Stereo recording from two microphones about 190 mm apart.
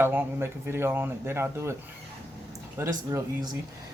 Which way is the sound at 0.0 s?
10° right (ahead or behind).